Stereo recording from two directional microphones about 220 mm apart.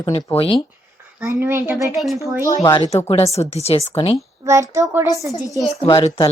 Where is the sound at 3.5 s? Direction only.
30° left (ahead or behind).